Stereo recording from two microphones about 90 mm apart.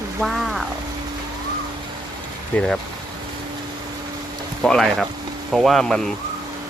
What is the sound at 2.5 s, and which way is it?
Speech, 15° left (ahead or behind).